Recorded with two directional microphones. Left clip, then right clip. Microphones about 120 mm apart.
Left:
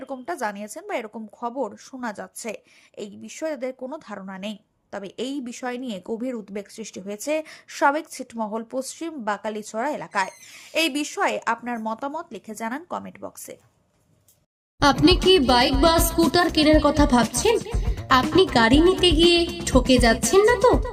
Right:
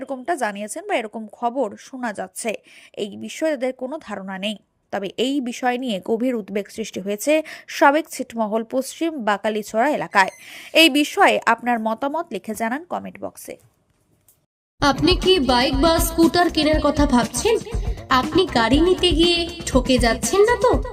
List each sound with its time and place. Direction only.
0.0 s a woman's voice: 20° right (ahead or behind); by 12.8 s 45° right (ahead or behind)
12.9 s a woman's voice: 25° right (ahead or behind)
14.8 s speech: centre (ahead or behind)